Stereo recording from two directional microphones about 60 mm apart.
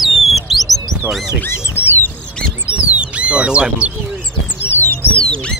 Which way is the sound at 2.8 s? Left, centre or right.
Right.